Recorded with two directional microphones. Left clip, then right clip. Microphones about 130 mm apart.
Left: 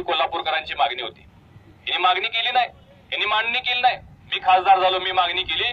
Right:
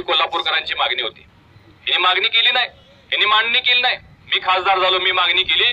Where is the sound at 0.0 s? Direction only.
35° left (ahead or behind).